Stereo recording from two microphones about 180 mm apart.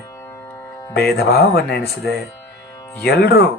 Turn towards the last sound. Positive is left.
turn(degrees=60)  # may be behind; listen again after turning